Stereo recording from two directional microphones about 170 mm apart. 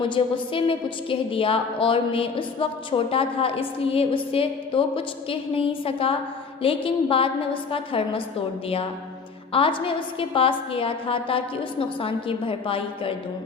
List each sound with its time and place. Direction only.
0.0 s a woman's voice: 30° left (ahead or behind)
9.5 s a woman's voice: 30° left (ahead or behind)